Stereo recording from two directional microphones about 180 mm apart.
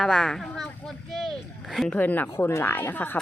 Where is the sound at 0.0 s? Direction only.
5° left (ahead or behind).